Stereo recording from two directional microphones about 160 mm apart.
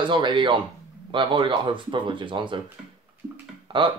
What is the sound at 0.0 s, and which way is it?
Speech, 30° right (ahead or behind).